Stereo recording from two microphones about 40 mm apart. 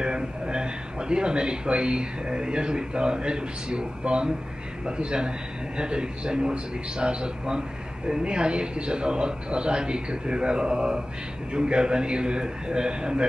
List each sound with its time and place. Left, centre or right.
0.0 s a man's voice: right